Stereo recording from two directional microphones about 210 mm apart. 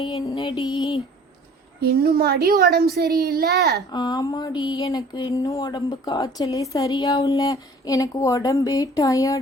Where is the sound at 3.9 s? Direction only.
20° left (ahead or behind).